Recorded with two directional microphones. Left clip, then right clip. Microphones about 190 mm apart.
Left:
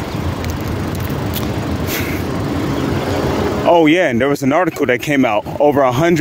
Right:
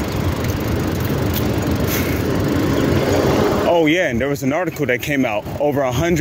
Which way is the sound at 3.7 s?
40° left (ahead or behind).